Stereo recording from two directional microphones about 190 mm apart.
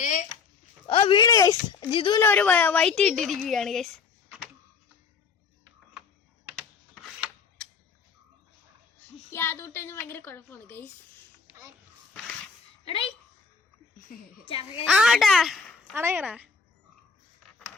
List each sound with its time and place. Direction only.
0.0 s a sound: 40° left (ahead or behind)
0.9 s speech: 30° left (ahead or behind)
2.2 s a woman's voice: 10° left (ahead or behind)
6.6 s a sound: centre (ahead or behind)
9.3 s a woman's voice: 10° left (ahead or behind)
11.4 s a sound: 15° right (ahead or behind)
12.8 s a woman's voice: 30° left (ahead or behind)
14.1 s a woman's voice: 50° left (ahead or behind)
14.4 s speech: 30° left (ahead or behind)
14.8 s a child's voice: 5° right (ahead or behind)